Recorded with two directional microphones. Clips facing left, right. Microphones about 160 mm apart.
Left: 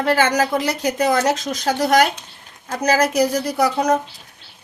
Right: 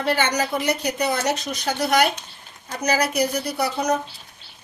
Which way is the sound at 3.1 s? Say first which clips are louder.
Left 5 dB; 90° left.